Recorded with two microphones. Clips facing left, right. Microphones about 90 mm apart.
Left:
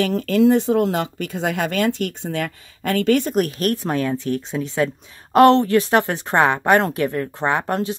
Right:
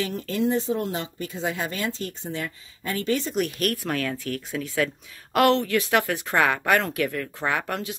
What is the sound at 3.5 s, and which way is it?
Speech, 35° left (ahead or behind).